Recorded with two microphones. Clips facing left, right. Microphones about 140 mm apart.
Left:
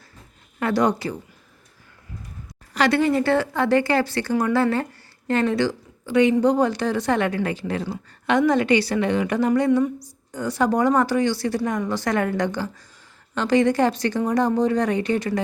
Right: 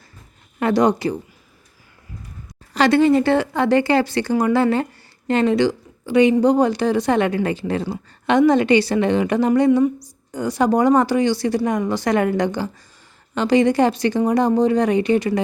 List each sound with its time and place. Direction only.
0.6 s speech: 20° right (ahead or behind)
2.7 s a woman's voice: 25° right (ahead or behind)